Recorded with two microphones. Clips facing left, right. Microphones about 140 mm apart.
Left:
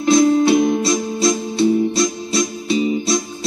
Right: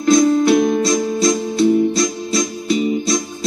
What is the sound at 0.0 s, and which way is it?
Music, 25° left (ahead or behind).